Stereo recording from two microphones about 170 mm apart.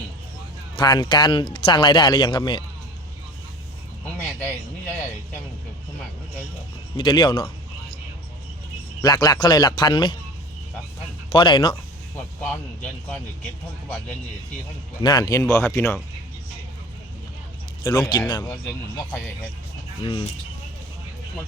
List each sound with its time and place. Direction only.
0.8 s speech: 25° left (ahead or behind)
4.2 s a sound: 10° left (ahead or behind)
6.9 s speech: 30° left (ahead or behind)
9.0 s speech: 25° left (ahead or behind)
11.3 s speech: 30° left (ahead or behind)
12.4 s speech: 5° left (ahead or behind)
15.0 s speech: 25° left (ahead or behind)
18.1 s speech: 25° left (ahead or behind)
20.1 s speech: 30° left (ahead or behind)